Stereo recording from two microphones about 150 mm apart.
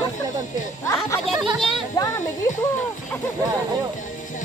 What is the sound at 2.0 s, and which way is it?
Music, 25° left (ahead or behind).